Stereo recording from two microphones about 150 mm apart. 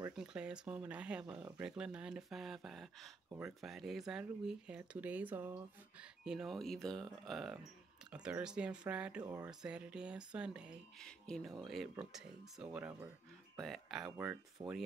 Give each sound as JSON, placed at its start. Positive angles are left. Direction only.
{"t": 0.1, "sound": "speech", "side_deg": -5}
{"t": 1.2, "sound": "speech", "side_deg": -25}
{"t": 1.6, "sound": "speech", "side_deg": -5}
{"t": 11.0, "sound": "speech", "side_deg": 5}
{"t": 13.6, "sound": "speech", "side_deg": 0}